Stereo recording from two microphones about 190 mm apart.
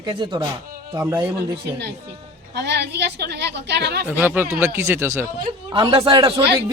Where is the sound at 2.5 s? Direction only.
60° right (ahead or behind).